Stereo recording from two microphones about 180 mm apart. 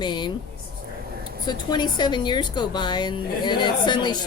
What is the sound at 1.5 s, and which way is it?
A woman's voice, 25° left (ahead or behind).